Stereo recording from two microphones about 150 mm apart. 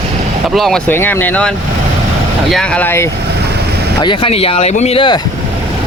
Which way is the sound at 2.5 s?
5° left (ahead or behind).